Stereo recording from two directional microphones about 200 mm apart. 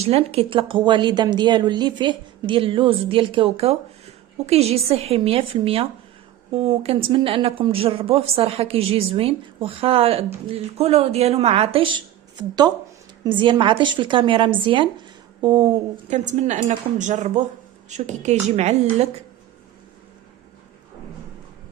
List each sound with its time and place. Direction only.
0.0 s speech: 30° right (ahead or behind)
16.0 s a woman's voice: 35° right (ahead or behind)